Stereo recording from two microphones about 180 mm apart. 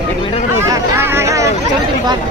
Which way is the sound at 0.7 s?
15° right (ahead or behind).